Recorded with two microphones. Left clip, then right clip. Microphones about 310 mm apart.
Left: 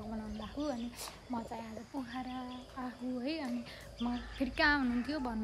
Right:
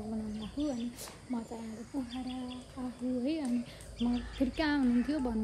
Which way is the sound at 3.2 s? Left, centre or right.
Centre.